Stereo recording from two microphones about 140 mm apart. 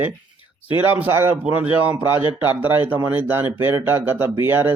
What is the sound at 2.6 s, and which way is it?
Speech, 15° right (ahead or behind).